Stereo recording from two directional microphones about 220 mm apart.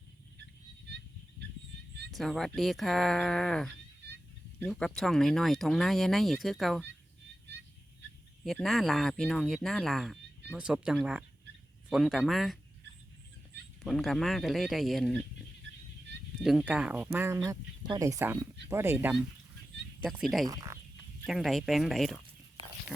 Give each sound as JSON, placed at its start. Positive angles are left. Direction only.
{"t": 2.0, "sound": "speech", "side_deg": 0}
{"t": 8.4, "sound": "speech", "side_deg": 0}
{"t": 13.8, "sound": "speech", "side_deg": 0}
{"t": 16.4, "sound": "speech", "side_deg": 0}
{"t": 20.5, "sound": "speech", "side_deg": -15}
{"t": 21.2, "sound": "speech", "side_deg": 0}